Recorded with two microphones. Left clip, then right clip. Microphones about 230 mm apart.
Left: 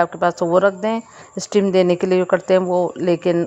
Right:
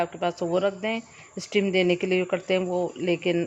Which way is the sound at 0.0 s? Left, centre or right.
Left.